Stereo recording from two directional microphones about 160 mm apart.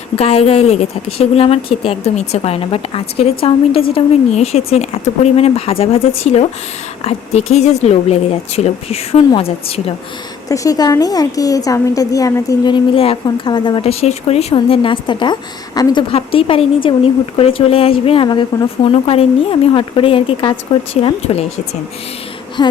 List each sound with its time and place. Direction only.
0.2 s a woman's voice: 40° left (ahead or behind)
10.5 s a woman's voice: 20° left (ahead or behind); by 21.4 s 40° left (ahead or behind)